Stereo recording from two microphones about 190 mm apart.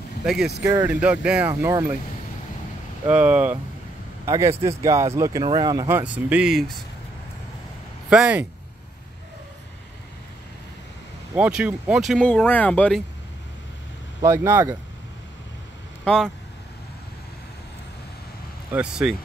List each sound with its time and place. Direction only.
0.2 s speech: centre (ahead or behind)
0.7 s speech: 20° right (ahead or behind)
1.0 s speech: 5° right (ahead or behind)
3.1 s speech: 5° right (ahead or behind)
8.1 s speech: 5° right (ahead or behind)
11.3 s speech: 5° right (ahead or behind)
14.2 s speech: 15° right (ahead or behind)
16.0 s speech: centre (ahead or behind)
18.7 s speech: 5° right (ahead or behind)